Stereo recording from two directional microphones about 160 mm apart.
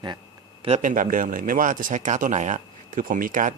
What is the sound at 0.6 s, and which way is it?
Speech, 45° right (ahead or behind).